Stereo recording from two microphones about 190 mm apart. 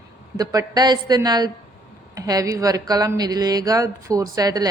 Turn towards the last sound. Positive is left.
turn(degrees=-20)  # may be behind; listen again after turning